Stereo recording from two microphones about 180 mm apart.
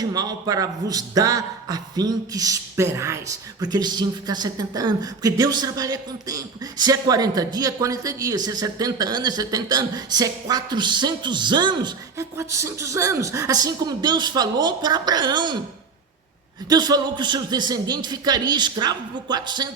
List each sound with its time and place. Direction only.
0.0 s a man's voice: 20° right (ahead or behind)
16.6 s a man's voice: 20° right (ahead or behind)